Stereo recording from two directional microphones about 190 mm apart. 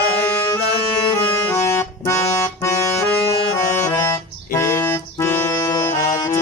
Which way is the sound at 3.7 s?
15° left (ahead or behind).